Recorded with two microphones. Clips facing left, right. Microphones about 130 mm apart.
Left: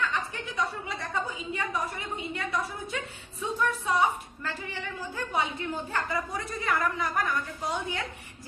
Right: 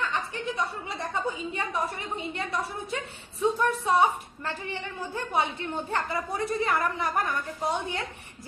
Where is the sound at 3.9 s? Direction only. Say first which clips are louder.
Right 4 dB; 25° right (ahead or behind).